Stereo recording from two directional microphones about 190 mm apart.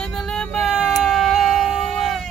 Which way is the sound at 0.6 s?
Centre (ahead or behind).